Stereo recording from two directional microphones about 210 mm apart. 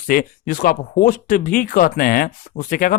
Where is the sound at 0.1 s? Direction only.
40° left (ahead or behind).